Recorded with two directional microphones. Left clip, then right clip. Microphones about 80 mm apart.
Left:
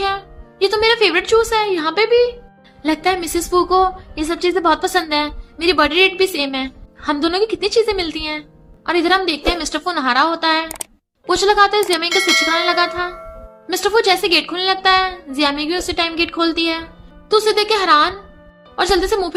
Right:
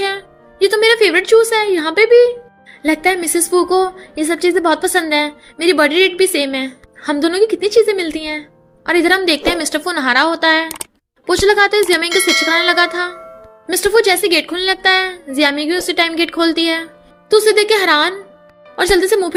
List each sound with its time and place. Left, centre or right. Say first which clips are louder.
0.6 s a woman's voice: right 3 dB; right
11.3 s a woman's voice: right 1 dB; right
12.0 s a sound: right 1 dB; centre
12.5 s a woman's voice: right 3 dB; right
13.7 s a woman's voice: right 2 dB; right
17.2 s a woman's voice: right 4 dB; right
18.8 s a woman's voice: right 3 dB; right